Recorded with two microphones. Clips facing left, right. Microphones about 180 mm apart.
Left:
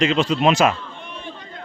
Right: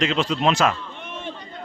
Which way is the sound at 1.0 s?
75° right (ahead or behind).